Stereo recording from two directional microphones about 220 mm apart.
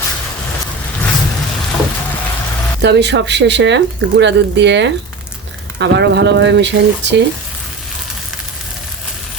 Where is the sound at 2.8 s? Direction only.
50° right (ahead or behind).